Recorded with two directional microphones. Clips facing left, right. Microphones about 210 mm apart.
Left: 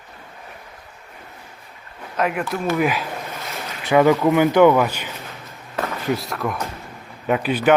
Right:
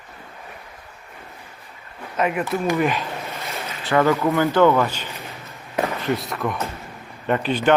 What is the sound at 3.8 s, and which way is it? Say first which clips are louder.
Speech: left 3 dB; 15° left (ahead or behind).